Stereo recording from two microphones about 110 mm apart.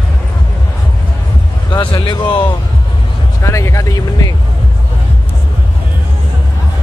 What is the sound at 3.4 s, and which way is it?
Vehicle, 30° left (ahead or behind).